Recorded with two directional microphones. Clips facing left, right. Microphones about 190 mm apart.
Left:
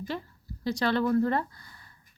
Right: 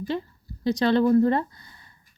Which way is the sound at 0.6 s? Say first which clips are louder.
Right 6 dB; 20° right (ahead or behind).